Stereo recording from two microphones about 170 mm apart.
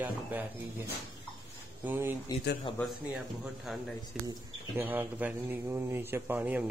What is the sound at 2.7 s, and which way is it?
Speech, 30° left (ahead or behind).